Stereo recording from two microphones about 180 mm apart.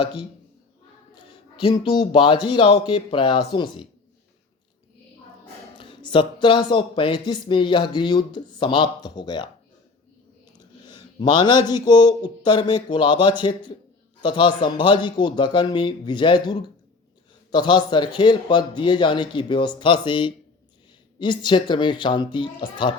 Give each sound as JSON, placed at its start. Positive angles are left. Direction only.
{"t": 0.0, "sound": "speech", "side_deg": 25}
{"t": 5.7, "sound": "speech", "side_deg": 25}
{"t": 10.6, "sound": "a man's voice", "side_deg": 25}